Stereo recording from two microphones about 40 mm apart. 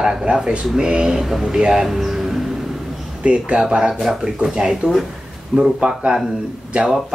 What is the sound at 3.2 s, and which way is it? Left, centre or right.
Speech, right.